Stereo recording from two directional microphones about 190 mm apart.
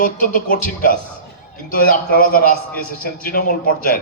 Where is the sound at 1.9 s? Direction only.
50° left (ahead or behind).